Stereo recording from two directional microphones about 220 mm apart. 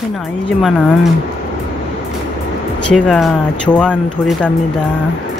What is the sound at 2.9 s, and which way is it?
Speech, centre (ahead or behind).